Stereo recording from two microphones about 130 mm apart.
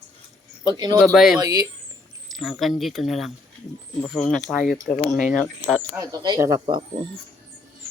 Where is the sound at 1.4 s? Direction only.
30° right (ahead or behind).